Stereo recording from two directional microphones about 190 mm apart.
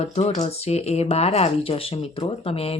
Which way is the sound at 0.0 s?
35° left (ahead or behind).